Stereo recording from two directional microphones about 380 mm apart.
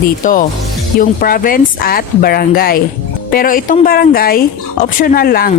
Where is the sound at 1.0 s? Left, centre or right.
Left.